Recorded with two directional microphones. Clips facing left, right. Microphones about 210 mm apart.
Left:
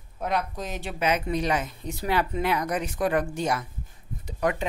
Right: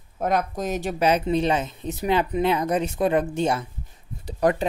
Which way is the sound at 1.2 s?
25° right (ahead or behind).